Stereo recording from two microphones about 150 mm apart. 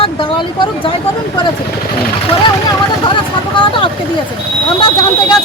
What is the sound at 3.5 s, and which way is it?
Speech, 35° left (ahead or behind).